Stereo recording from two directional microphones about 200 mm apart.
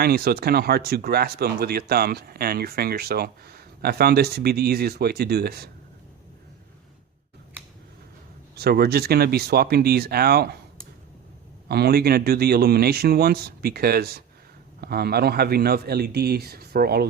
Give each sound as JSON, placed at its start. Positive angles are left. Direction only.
{"t": 0.0, "sound": "speech", "side_deg": -50}
{"t": 8.5, "sound": "speech", "side_deg": -50}
{"t": 11.7, "sound": "speech", "side_deg": -55}